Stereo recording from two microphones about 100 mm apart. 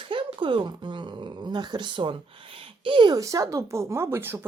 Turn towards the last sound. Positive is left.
turn(degrees=-25)  # may be behind; listen again after turning